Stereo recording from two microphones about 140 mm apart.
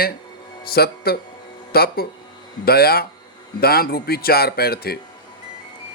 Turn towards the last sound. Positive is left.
turn(degrees=90)